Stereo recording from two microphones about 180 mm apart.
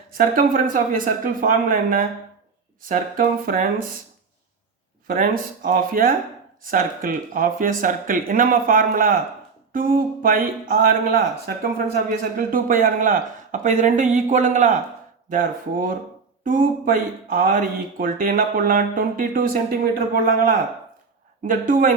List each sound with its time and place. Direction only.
0.1 s speech: 50° right (ahead or behind)
5.0 s speech: 50° right (ahead or behind)